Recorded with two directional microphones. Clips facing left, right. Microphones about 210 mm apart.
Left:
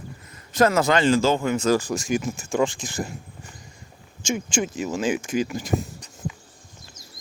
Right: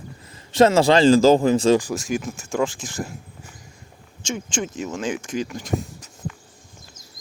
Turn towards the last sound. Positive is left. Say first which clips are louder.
# even
turn(degrees=-5)  # may be behind; listen again after turning